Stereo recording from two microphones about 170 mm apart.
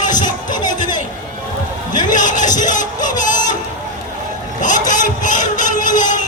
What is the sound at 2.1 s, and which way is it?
Music, 50° left (ahead or behind).